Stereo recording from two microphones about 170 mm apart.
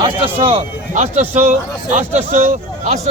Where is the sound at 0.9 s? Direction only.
40° right (ahead or behind).